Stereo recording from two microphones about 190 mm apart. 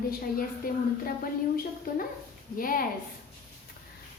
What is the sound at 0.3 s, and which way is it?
A woman's voice, 50° left (ahead or behind).